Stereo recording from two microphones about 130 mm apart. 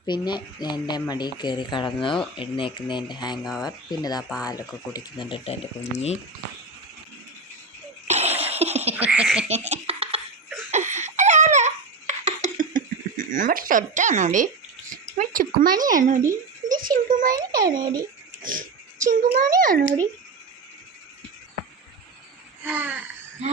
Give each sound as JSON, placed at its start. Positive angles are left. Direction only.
{"t": 0.0, "sound": "speech", "side_deg": 35}
{"t": 4.2, "sound": "speech", "side_deg": -5}
{"t": 4.9, "sound": "speech", "side_deg": 35}
{"t": 8.0, "sound": "a sound", "side_deg": -55}
{"t": 8.9, "sound": "frog", "side_deg": -10}
{"t": 9.5, "sound": "a sound", "side_deg": -55}
{"t": 10.7, "sound": "a sound", "side_deg": -65}
{"t": 15.2, "sound": "speech", "side_deg": -90}
{"t": 17.3, "sound": "a child's voice", "side_deg": -30}
{"t": 19.0, "sound": "a child's voice", "side_deg": -75}
{"t": 19.4, "sound": "speech", "side_deg": -90}
{"t": 22.6, "sound": "frog", "side_deg": -10}